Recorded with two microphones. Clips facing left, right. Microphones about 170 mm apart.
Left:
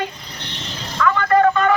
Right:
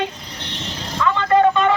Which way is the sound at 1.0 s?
20° right (ahead or behind).